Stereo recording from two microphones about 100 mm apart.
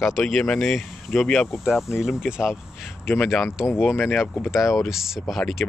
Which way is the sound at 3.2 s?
5° left (ahead or behind).